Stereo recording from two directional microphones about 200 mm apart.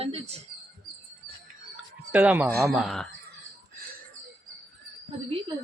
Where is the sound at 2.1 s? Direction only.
10° right (ahead or behind).